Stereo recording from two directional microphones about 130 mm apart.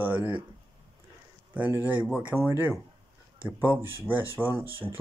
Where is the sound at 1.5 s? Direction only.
10° right (ahead or behind).